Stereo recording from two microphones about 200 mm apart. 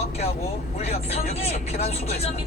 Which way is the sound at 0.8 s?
30° left (ahead or behind).